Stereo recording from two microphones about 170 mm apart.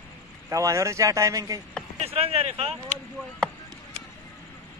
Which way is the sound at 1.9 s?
35° right (ahead or behind).